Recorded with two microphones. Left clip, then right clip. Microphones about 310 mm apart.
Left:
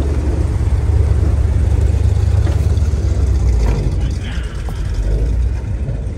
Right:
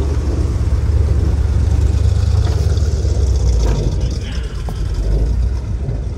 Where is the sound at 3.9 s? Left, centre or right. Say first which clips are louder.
Even; centre.